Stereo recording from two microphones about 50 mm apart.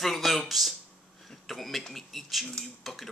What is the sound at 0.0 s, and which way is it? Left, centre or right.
Speech, centre.